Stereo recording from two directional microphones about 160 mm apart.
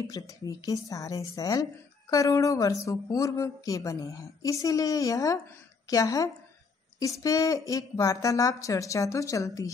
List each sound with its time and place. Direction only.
0.2 s a woman's voice: 25° left (ahead or behind)